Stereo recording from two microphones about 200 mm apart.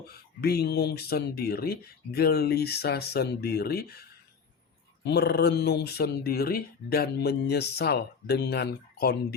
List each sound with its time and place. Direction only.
0.1 s speech: 50° left (ahead or behind)